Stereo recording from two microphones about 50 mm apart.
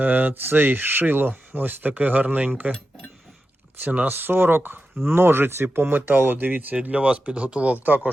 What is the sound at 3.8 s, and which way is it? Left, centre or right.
Speech, right.